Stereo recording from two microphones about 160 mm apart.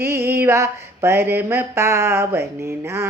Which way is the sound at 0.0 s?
15° right (ahead or behind).